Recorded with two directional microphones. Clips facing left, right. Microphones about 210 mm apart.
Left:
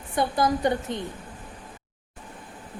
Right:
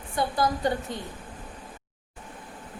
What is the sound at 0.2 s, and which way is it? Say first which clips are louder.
Speech: left 3 dB; 20° left (ahead or behind).